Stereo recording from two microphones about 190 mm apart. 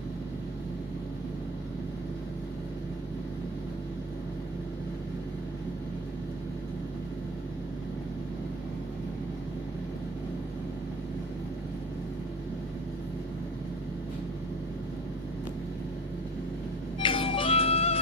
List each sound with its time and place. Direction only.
17.0 s music: 30° left (ahead or behind)